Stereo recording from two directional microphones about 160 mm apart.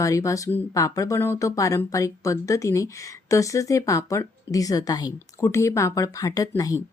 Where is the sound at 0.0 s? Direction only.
20° left (ahead or behind).